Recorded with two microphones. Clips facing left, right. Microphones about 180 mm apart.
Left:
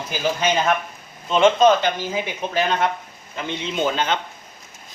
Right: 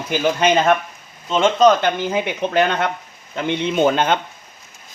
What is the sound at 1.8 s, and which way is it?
Speech, 60° right (ahead or behind).